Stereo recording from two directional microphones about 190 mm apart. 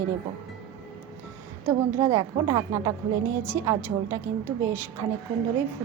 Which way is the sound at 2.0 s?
20° right (ahead or behind).